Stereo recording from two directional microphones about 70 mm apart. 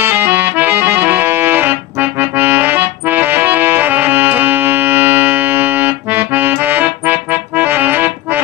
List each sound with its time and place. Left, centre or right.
0.0 s accordion: right